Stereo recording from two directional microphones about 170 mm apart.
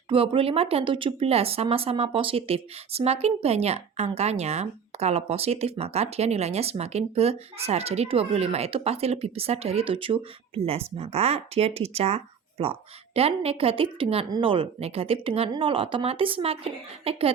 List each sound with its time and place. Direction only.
0.1 s speech: 30° right (ahead or behind)